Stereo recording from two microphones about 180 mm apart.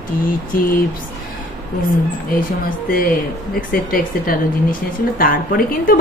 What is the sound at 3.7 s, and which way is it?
A woman's voice, 55° left (ahead or behind).